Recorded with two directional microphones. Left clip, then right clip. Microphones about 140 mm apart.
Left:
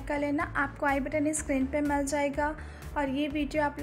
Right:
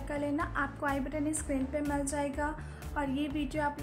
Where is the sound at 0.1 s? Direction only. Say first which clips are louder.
Left 4 dB; 20° left (ahead or behind).